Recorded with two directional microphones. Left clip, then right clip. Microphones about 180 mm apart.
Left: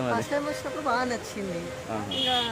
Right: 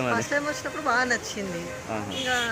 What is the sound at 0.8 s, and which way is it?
Speech, 10° left (ahead or behind).